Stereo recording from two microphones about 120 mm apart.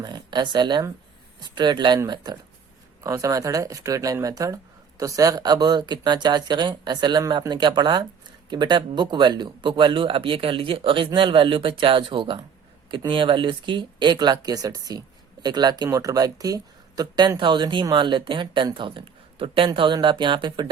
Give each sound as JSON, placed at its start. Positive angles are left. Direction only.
{"t": 0.0, "sound": "speech", "side_deg": -40}